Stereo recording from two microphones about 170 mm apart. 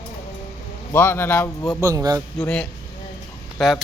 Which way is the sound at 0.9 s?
15° left (ahead or behind).